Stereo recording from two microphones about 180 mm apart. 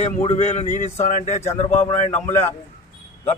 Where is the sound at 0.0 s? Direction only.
35° left (ahead or behind).